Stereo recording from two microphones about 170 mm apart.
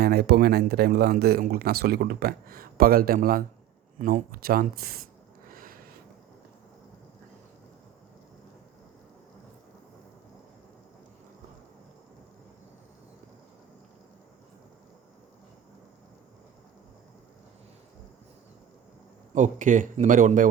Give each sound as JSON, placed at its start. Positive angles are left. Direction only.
{"t": 0.0, "sound": "speech", "side_deg": -70}
{"t": 5.5, "sound": "a sound", "side_deg": -55}
{"t": 19.3, "sound": "a man's voice", "side_deg": -45}